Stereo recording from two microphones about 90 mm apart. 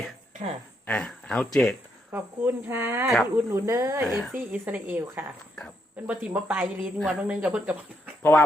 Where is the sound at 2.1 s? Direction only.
25° right (ahead or behind).